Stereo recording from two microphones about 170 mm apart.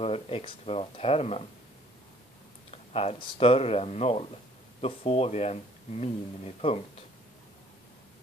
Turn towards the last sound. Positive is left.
turn(degrees=35)  # may be behind; listen again after turning